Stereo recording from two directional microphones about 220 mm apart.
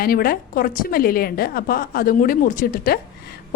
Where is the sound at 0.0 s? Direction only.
45° left (ahead or behind).